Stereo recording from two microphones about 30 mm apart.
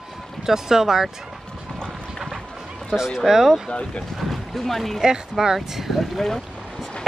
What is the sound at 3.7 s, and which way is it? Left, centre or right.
Speech, left.